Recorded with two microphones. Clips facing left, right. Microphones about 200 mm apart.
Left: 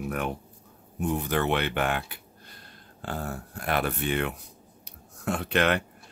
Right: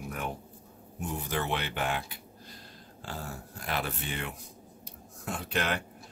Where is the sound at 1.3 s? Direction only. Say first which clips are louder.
Left 4 dB; 65° left (ahead or behind).